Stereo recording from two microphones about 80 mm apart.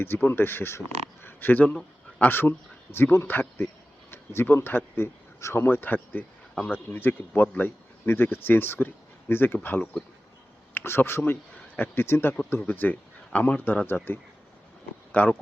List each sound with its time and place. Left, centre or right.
0.3 s speech: left